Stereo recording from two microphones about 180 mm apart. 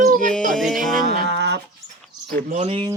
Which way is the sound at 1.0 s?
70° right (ahead or behind).